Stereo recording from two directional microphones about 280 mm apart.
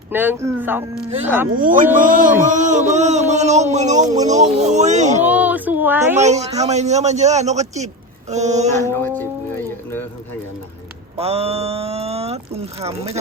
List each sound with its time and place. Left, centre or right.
0.1 s speech: centre
1.5 s speech: right
5.2 s a sound: centre
6.1 s speech: right
8.9 s speech: centre
11.2 s speech: right